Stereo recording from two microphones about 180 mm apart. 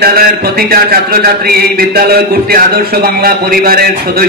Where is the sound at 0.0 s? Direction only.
55° right (ahead or behind).